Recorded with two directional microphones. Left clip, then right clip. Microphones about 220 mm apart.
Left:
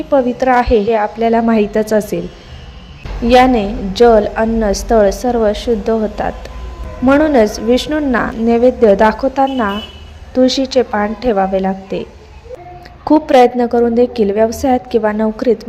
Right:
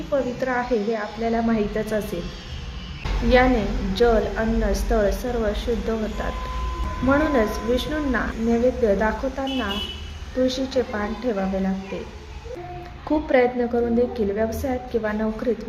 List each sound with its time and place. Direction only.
0.1 s a woman's voice: 35° left (ahead or behind)
3.2 s a woman's voice: 35° left (ahead or behind)
13.1 s a woman's voice: 35° left (ahead or behind)